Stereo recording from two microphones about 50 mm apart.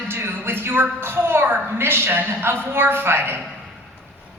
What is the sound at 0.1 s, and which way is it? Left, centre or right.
A woman's voice, right.